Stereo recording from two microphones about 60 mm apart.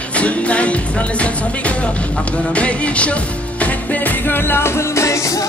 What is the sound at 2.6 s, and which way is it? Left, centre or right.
Music, left.